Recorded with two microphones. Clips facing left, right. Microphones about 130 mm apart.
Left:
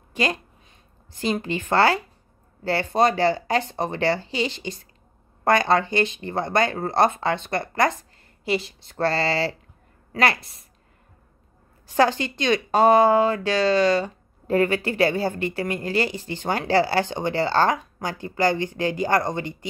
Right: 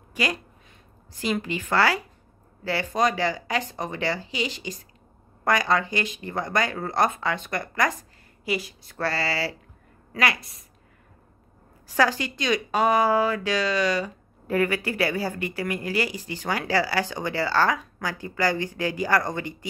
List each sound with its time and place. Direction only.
0.1 s speech: 30° left (ahead or behind)
11.9 s speech: 25° left (ahead or behind)